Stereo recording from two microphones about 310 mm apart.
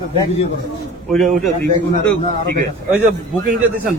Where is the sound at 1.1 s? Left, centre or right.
Centre.